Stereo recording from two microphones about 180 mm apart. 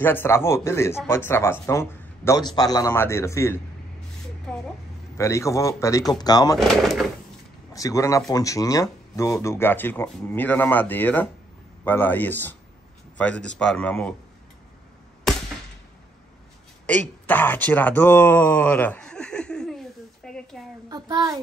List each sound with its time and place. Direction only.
0.0 s speech: 10° left (ahead or behind)
4.5 s a sound: 5° left (ahead or behind)
5.1 s speech: 15° left (ahead or behind)
6.7 s speech: centre (ahead or behind)
7.7 s speech: 20° left (ahead or behind)
17.3 s speech: 10° left (ahead or behind)
20.9 s child singing: 20° right (ahead or behind)